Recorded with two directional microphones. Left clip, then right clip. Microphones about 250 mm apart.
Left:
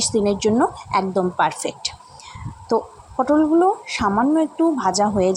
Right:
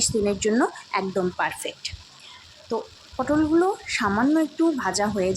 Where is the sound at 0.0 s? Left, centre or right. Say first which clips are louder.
Left 4 dB; centre.